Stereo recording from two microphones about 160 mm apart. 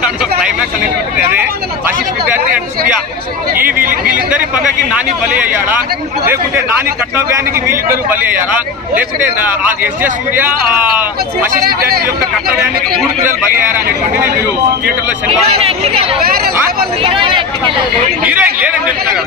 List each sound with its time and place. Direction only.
1.1 s a man's voice: 10° right (ahead or behind)
3.8 s speech: 60° right (ahead or behind)
4.9 s a man's voice: 10° right (ahead or behind)
7.2 s a man's voice: 15° right (ahead or behind)
10.3 s a man's voice: 10° right (ahead or behind)
15.5 s speech: 40° right (ahead or behind)
18.2 s a man's voice: 10° right (ahead or behind)